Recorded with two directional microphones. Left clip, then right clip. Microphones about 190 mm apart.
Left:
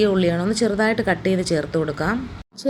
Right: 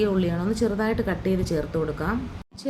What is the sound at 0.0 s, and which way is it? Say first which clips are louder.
A woman's voice: left 6 dB; 15° left (ahead or behind).